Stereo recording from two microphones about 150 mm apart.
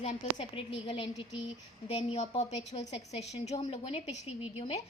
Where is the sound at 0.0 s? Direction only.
50° left (ahead or behind).